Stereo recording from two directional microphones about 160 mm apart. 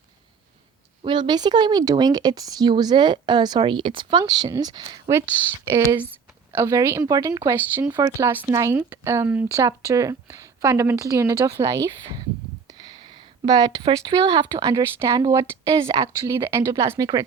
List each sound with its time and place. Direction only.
1.0 s speech: 30° right (ahead or behind)
12.6 s a sound: 30° right (ahead or behind)
14.6 s speech: 20° right (ahead or behind)